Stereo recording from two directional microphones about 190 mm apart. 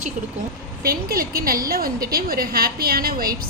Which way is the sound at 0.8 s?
50° right (ahead or behind).